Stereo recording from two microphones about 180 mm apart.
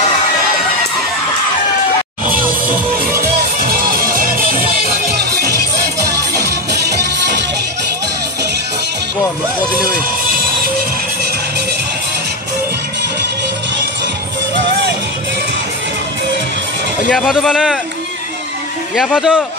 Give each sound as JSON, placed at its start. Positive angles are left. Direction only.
{"t": 2.9, "sound": "music", "side_deg": -55}
{"t": 17.1, "sound": "speech", "side_deg": 0}
{"t": 18.9, "sound": "speech", "side_deg": 0}